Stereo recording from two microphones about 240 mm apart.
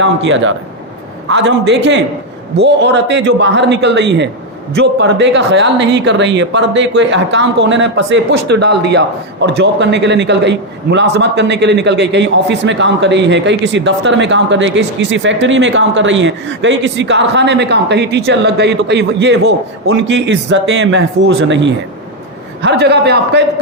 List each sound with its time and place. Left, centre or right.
0.0 s a man's voice: right